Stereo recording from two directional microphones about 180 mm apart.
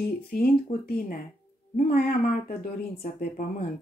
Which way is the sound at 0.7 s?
40° left (ahead or behind).